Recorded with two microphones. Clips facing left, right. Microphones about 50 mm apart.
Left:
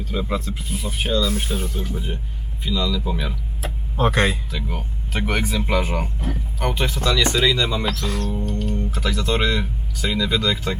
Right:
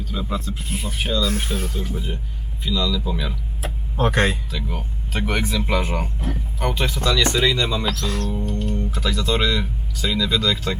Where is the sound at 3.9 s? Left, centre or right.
Left.